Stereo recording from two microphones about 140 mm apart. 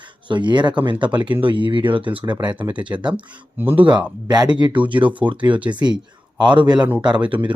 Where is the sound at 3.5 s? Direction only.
15° right (ahead or behind).